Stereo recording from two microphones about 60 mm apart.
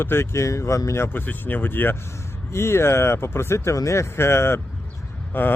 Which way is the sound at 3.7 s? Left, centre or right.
Left.